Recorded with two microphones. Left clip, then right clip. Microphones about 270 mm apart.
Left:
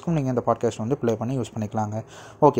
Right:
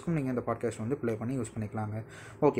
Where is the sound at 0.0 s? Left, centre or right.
Left.